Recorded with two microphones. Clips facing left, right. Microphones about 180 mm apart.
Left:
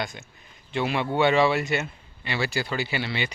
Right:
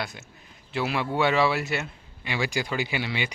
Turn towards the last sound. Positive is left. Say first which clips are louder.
# even
turn(degrees=-10)  # may be behind; listen again after turning